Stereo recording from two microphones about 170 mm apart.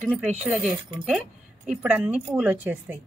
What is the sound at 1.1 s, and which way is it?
A woman's voice, 5° right (ahead or behind).